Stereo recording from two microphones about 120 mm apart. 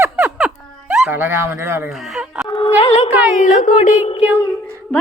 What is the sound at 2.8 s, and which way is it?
Speech, 50° left (ahead or behind).